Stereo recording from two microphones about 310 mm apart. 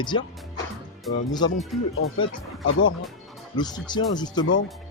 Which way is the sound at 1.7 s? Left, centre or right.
Centre.